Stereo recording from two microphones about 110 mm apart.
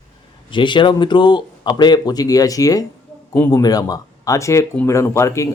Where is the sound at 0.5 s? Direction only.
45° left (ahead or behind).